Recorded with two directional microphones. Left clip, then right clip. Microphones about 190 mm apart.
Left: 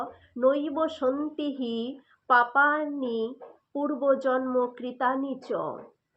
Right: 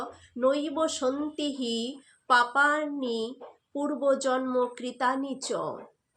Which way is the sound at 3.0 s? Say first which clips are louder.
Left 1 dB; 5° right (ahead or behind).